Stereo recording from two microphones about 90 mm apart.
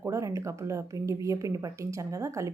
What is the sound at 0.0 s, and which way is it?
A woman's voice, 35° right (ahead or behind).